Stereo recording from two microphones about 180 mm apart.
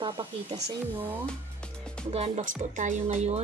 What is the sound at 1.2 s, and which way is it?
Speech, 5° left (ahead or behind).